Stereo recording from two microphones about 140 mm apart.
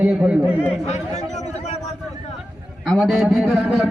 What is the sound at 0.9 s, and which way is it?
Chatter, 55° left (ahead or behind).